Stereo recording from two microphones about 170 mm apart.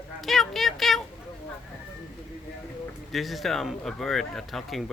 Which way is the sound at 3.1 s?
Centre (ahead or behind).